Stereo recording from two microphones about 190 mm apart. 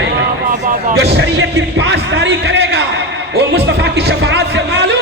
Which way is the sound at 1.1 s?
65° right (ahead or behind).